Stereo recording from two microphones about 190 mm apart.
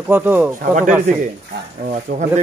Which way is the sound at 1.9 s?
40° right (ahead or behind).